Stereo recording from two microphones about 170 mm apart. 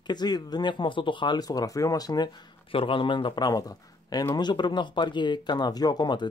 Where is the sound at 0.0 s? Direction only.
25° left (ahead or behind).